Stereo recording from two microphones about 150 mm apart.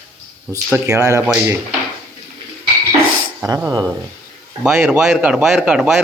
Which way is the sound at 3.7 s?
25° right (ahead or behind).